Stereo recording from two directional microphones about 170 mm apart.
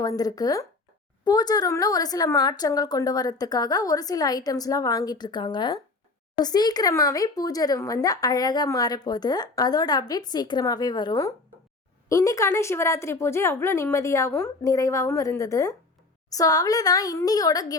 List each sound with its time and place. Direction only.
0.0 s a woman's voice: 20° left (ahead or behind)